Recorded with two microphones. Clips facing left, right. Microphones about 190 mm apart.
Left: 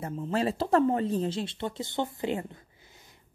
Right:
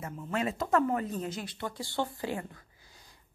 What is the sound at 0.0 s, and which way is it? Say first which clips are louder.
A woman's voice: left 4 dB; 30° left (ahead or behind).